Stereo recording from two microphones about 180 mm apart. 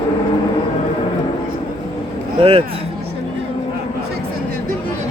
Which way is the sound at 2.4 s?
30° right (ahead or behind).